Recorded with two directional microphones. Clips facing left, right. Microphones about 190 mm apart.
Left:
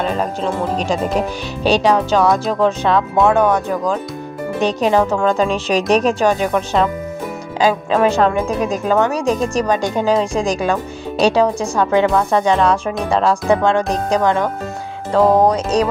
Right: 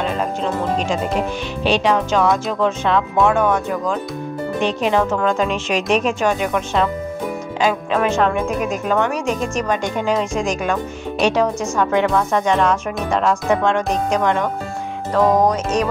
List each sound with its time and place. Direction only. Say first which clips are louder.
1.6 s speech: left 3 dB; 40° left (ahead or behind)